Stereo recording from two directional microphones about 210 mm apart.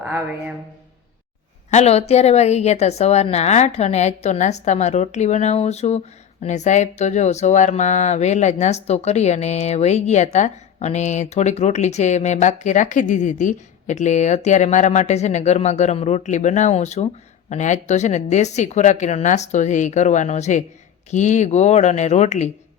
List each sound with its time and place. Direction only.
0.0 s speech: 5° right (ahead or behind)
1.7 s speech: 30° left (ahead or behind)